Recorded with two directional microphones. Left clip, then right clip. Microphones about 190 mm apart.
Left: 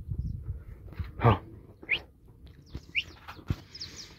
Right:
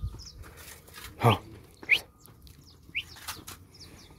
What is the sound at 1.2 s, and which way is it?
Dog, 5° right (ahead or behind).